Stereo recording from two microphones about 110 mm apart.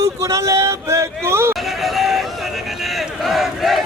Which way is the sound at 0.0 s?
30° right (ahead or behind).